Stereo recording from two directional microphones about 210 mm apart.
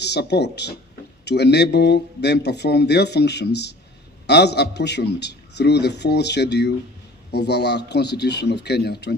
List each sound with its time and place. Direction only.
0.0 s speech: 55° left (ahead or behind)